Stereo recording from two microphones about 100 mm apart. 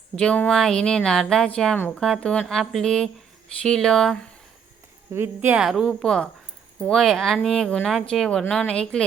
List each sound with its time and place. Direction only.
0.2 s a woman's voice: 10° left (ahead or behind)
5.1 s speech: 25° right (ahead or behind)
5.5 s a woman's voice: 5° right (ahead or behind)